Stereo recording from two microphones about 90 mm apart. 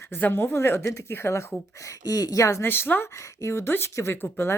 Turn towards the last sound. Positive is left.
turn(degrees=25)  # may be behind; listen again after turning